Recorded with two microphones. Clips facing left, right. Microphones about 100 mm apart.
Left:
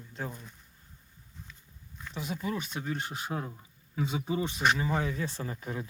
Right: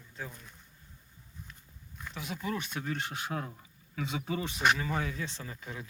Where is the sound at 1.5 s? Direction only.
55° right (ahead or behind).